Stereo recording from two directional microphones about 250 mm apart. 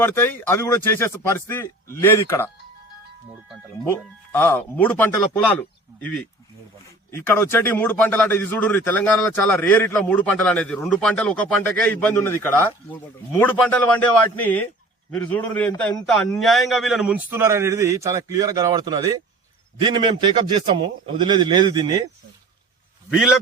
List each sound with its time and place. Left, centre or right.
0.0 s a man's voice: centre
4.3 s a man's voice: centre
23.0 s a man's voice: centre